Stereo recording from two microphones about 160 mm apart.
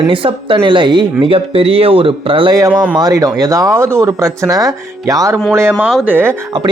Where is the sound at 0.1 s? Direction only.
35° right (ahead or behind).